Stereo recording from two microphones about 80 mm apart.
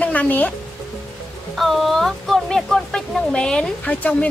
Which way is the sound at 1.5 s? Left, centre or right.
Centre.